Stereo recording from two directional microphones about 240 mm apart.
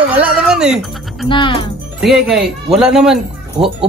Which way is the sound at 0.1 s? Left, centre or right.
Centre.